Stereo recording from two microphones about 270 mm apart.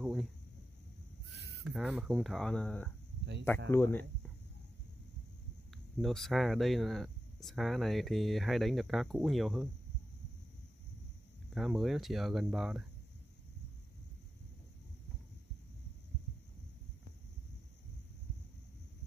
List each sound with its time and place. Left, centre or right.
0.0 s speech: centre
1.7 s speech: centre
5.9 s speech: centre
11.5 s speech: centre